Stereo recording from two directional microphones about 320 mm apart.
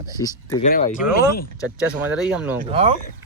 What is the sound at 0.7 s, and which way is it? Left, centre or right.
Speech, left.